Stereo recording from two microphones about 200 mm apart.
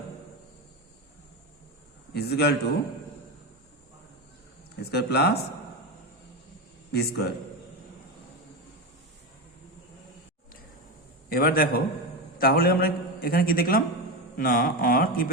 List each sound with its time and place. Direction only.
2.1 s a man's voice: 55° left (ahead or behind)
4.8 s a man's voice: 55° left (ahead or behind)
6.9 s a man's voice: 55° left (ahead or behind)
11.3 s a man's voice: 45° left (ahead or behind)